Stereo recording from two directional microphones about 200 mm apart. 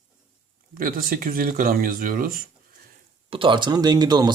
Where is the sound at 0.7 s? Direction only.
45° right (ahead or behind).